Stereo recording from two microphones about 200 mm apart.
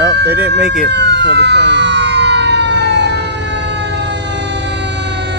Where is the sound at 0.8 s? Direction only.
60° right (ahead or behind).